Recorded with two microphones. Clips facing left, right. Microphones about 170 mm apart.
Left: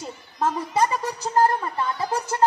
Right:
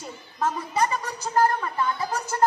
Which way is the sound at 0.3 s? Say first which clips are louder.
Left 2 dB; 35° left (ahead or behind).